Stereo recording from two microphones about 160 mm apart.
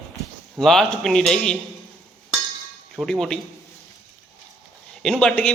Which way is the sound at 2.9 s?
Centre (ahead or behind).